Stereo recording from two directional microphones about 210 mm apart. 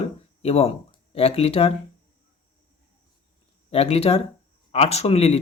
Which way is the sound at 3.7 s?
30° left (ahead or behind).